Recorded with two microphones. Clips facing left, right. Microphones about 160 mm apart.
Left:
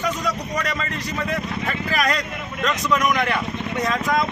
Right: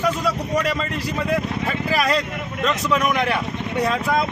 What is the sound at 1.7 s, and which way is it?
Speech, 5° right (ahead or behind).